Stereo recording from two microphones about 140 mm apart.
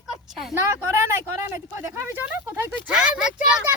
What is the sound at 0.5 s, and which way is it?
Speech, 20° right (ahead or behind).